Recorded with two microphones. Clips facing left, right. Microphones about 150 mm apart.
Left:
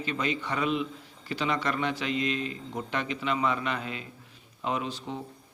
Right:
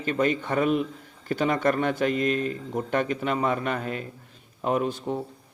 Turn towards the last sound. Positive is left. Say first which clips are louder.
# right 6 dB
turn(degrees=-50)  # may be behind; listen again after turning